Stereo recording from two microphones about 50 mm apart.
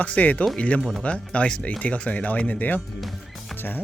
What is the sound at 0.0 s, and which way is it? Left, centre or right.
Speech, left.